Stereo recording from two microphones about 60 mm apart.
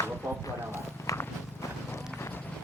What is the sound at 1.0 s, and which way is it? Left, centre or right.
Walk, left.